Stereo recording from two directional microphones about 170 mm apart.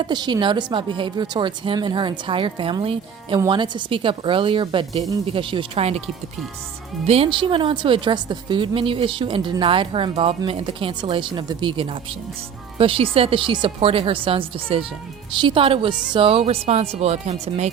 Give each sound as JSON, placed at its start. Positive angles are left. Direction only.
{"t": 0.0, "sound": "a woman's voice", "side_deg": -25}
{"t": 7.1, "sound": "a woman's voice", "side_deg": -35}